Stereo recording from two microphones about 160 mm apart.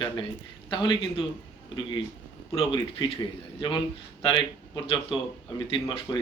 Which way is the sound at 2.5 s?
30° left (ahead or behind).